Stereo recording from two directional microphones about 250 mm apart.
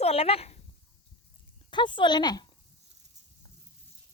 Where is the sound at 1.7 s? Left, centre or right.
Centre.